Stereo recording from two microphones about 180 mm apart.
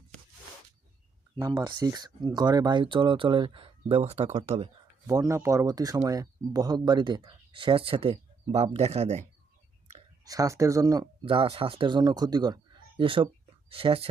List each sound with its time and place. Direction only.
1.4 s speech: 20° right (ahead or behind)
5.0 s speech: 20° right (ahead or behind); by 9.2 s 35° right (ahead or behind)
10.2 s speech: 20° right (ahead or behind)
11.3 s speech: 30° right (ahead or behind)